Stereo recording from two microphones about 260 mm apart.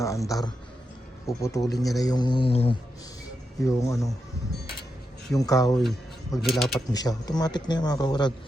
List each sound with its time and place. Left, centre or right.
0.0 s speech: centre
2.0 s mantra: centre
3.7 s speech: centre
5.4 s speech: centre
6.4 s speech: centre
6.9 s speech: centre